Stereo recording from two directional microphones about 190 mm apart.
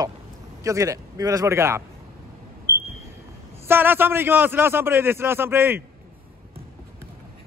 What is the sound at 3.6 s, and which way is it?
A man's voice, 10° right (ahead or behind).